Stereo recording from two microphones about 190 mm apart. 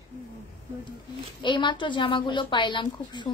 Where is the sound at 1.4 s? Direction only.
25° left (ahead or behind).